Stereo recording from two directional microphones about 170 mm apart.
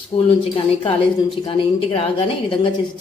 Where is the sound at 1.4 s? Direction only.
30° left (ahead or behind).